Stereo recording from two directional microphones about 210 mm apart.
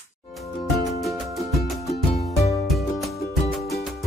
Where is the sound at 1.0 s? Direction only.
Centre (ahead or behind).